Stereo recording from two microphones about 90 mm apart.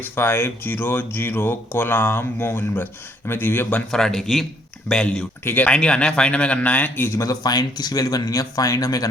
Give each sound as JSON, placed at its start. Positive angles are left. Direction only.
{"t": 0.0, "sound": "speech", "side_deg": 25}
{"t": 3.9, "sound": "speech", "side_deg": 5}
{"t": 7.2, "sound": "speech", "side_deg": 45}